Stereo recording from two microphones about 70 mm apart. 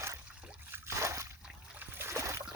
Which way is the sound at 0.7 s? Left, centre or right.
Right.